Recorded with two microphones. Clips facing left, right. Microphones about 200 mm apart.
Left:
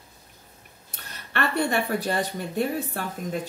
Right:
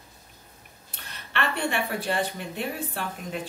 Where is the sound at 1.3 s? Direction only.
40° left (ahead or behind).